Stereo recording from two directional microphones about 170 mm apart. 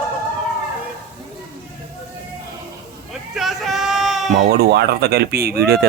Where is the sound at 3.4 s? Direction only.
Centre (ahead or behind).